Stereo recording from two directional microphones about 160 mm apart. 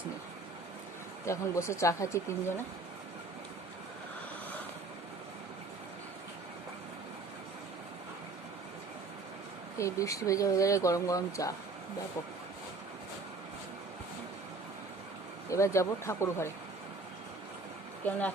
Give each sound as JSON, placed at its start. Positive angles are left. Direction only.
{"t": 1.3, "sound": "speech", "side_deg": 20}
{"t": 9.7, "sound": "speech", "side_deg": 20}
{"t": 15.4, "sound": "speech", "side_deg": 15}
{"t": 18.0, "sound": "speech", "side_deg": 10}